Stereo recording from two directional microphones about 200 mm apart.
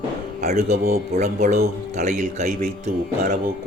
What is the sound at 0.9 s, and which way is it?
A man's voice, 40° right (ahead or behind).